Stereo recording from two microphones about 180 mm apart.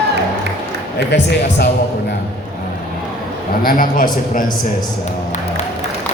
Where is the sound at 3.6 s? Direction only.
50° left (ahead or behind).